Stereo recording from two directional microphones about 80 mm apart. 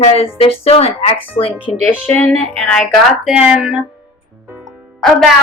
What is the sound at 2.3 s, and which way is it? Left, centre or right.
Speech, centre.